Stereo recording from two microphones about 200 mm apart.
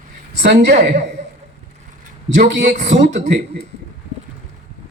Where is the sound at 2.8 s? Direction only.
35° right (ahead or behind).